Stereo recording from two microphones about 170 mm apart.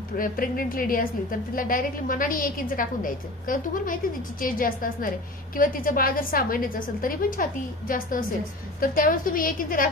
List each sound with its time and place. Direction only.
0.2 s a woman's voice: 55° left (ahead or behind)